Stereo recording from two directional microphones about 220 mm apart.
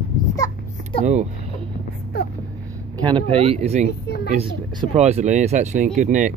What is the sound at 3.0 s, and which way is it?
Speech, 25° right (ahead or behind).